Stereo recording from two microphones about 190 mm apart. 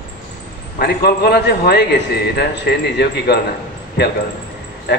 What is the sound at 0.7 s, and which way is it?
A man's voice, 55° left (ahead or behind).